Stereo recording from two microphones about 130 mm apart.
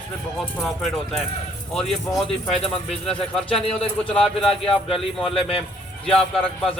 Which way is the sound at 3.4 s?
45° left (ahead or behind).